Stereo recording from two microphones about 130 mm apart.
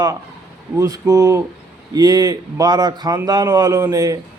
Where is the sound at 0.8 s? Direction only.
25° right (ahead or behind).